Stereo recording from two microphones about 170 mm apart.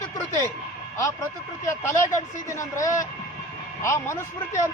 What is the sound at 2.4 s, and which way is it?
Speech, 20° left (ahead or behind).